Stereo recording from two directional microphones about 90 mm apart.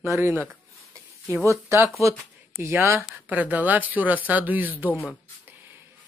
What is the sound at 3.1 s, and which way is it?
Speech, 20° right (ahead or behind).